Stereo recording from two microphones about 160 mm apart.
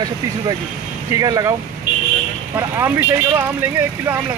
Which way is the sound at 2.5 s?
15° right (ahead or behind).